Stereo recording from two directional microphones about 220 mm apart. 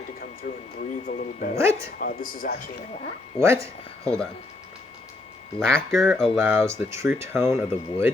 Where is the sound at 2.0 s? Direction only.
40° left (ahead or behind).